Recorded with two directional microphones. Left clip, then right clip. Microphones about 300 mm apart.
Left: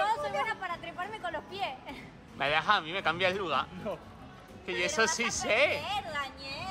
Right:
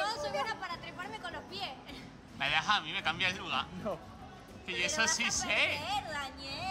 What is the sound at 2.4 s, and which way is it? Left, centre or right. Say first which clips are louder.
Speech: left 3 dB; centre.